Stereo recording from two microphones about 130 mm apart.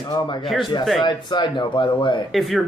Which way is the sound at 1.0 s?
35° left (ahead or behind).